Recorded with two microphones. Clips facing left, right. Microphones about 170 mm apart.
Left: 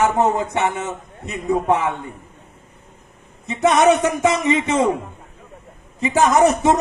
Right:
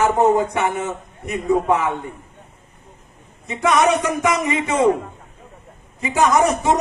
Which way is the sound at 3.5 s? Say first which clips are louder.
Left 2 dB; 25° left (ahead or behind).